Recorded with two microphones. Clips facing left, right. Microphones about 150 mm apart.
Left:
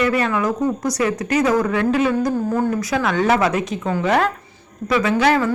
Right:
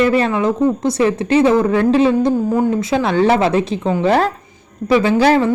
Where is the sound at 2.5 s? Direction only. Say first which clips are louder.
Right 4 dB; 20° right (ahead or behind).